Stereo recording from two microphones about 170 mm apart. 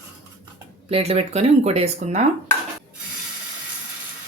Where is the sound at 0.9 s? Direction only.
35° right (ahead or behind).